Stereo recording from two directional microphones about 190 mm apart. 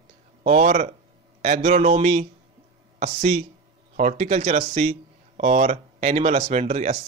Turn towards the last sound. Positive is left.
turn(degrees=-35)  # may be behind; listen again after turning